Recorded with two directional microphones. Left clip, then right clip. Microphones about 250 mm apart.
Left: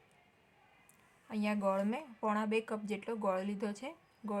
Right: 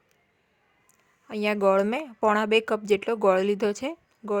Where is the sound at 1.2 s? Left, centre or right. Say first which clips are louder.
Right 12 dB; right.